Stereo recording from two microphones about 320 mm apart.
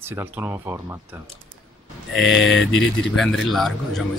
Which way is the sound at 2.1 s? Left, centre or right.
Left.